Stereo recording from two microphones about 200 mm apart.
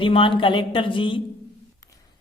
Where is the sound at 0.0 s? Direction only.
25° left (ahead or behind).